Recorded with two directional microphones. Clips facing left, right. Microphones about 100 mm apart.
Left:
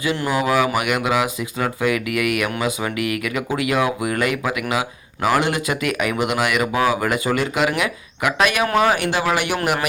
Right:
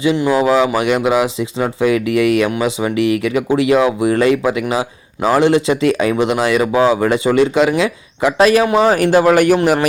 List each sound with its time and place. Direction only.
0.0 s speech: 20° right (ahead or behind)
8.9 s speech: 40° right (ahead or behind)